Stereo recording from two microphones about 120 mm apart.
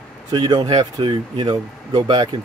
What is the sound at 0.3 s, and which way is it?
Speech, 35° right (ahead or behind).